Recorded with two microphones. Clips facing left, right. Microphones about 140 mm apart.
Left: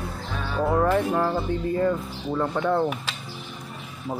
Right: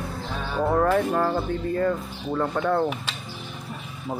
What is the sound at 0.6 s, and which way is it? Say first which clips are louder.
Speech: even; centre (ahead or behind).